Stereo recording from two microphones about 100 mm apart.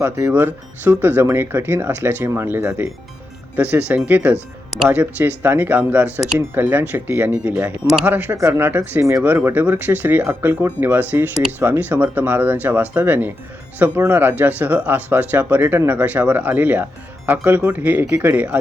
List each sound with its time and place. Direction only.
0.0 s speech: 25° right (ahead or behind)